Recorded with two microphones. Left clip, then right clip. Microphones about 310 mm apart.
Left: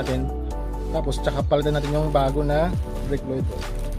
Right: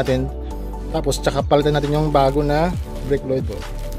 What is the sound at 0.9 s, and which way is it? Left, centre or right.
Speech, right.